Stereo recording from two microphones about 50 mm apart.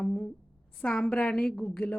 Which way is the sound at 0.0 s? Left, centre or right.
Centre.